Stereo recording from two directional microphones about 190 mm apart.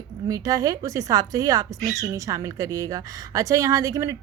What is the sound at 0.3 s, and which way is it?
Speech, 20° right (ahead or behind).